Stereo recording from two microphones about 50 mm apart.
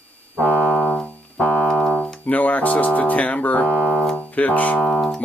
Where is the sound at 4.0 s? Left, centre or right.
Centre.